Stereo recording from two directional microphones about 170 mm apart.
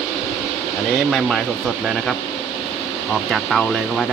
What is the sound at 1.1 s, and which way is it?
Speech, centre (ahead or behind).